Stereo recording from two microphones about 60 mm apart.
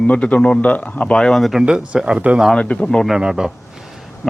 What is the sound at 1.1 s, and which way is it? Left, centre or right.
Speech, centre.